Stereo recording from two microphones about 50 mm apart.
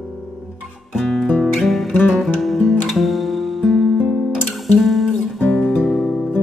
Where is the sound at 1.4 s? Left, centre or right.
Centre.